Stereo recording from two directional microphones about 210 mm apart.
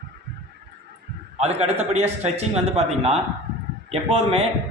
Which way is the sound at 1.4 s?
30° right (ahead or behind).